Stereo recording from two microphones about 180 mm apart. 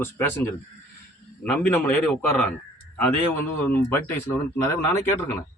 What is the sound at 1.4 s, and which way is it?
Speech, 10° left (ahead or behind).